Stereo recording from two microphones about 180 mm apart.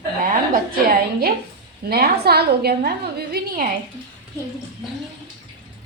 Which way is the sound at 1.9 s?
60° right (ahead or behind).